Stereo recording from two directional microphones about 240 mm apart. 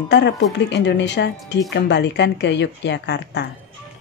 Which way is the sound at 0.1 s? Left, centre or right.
Left.